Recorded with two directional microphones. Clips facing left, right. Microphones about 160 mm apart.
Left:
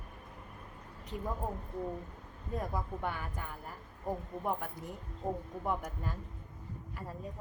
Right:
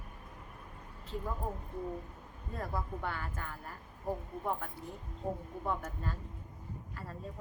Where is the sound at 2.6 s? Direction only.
15° left (ahead or behind).